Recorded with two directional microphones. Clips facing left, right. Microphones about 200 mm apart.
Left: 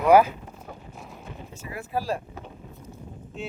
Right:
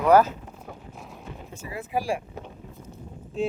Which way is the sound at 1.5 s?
55° right (ahead or behind).